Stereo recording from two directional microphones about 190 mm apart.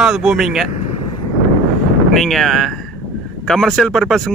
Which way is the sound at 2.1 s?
Centre (ahead or behind).